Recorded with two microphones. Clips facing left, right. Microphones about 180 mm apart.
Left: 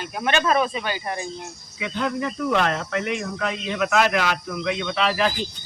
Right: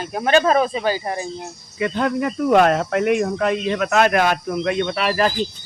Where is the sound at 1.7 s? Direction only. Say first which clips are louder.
Right 5 dB; 55° right (ahead or behind).